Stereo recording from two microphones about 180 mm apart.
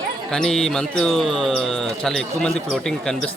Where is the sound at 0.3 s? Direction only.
5° left (ahead or behind).